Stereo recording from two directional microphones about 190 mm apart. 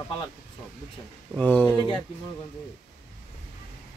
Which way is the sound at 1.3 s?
10° left (ahead or behind).